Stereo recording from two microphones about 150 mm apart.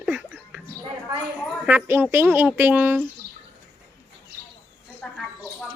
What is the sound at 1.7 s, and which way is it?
Speech, 10° right (ahead or behind).